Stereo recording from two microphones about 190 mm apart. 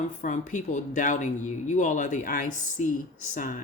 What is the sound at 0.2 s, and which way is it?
Speech, 40° left (ahead or behind).